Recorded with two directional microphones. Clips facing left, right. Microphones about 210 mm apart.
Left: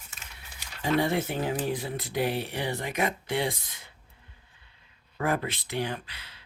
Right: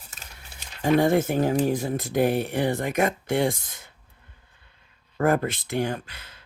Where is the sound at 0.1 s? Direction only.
40° right (ahead or behind).